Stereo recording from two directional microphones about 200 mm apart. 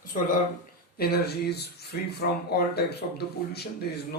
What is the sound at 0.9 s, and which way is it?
Speech, 50° left (ahead or behind).